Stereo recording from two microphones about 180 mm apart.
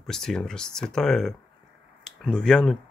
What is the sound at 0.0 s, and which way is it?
Speech, 5° left (ahead or behind).